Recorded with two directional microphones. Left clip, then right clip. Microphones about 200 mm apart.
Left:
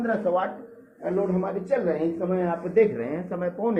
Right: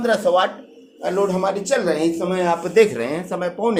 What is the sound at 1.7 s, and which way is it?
A man's voice, 35° right (ahead or behind).